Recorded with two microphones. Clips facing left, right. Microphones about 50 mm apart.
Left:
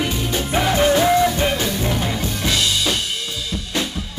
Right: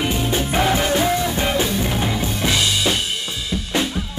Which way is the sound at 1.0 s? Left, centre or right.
Centre.